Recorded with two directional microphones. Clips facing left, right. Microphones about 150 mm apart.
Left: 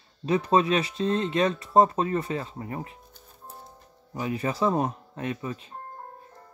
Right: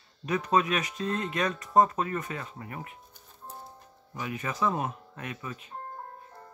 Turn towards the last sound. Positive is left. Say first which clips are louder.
# left 7 dB
turn(degrees=30)  # may be behind; listen again after turning